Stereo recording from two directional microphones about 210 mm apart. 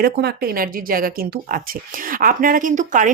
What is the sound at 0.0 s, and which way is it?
Speech, 50° right (ahead or behind).